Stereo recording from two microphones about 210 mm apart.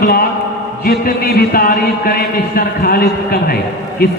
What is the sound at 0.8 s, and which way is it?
Speech, 45° left (ahead or behind).